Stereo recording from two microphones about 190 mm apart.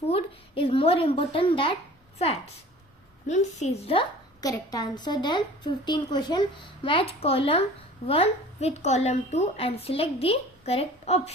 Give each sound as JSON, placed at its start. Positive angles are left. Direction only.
{"t": 0.1, "sound": "a woman's voice", "side_deg": 30}
{"t": 3.2, "sound": "a woman's voice", "side_deg": 40}